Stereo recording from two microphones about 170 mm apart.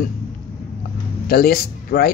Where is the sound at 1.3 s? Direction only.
60° left (ahead or behind).